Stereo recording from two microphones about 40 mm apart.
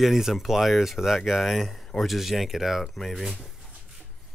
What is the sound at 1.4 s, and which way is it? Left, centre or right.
Speech, centre.